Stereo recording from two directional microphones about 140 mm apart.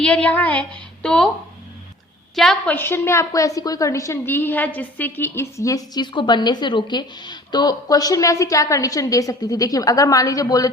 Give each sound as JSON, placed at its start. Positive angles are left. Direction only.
{"t": 0.0, "sound": "a woman's voice", "side_deg": 5}
{"t": 2.3, "sound": "a woman's voice", "side_deg": 5}
{"t": 2.7, "sound": "a woman's voice", "side_deg": 15}